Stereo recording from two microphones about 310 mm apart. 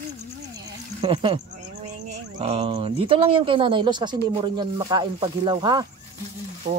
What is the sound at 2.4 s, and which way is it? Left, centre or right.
Speech, centre.